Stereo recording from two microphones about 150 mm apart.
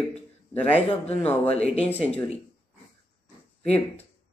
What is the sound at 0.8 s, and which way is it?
Speech, 45° left (ahead or behind).